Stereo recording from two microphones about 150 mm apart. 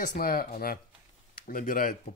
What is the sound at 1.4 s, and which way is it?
Speech, 70° left (ahead or behind).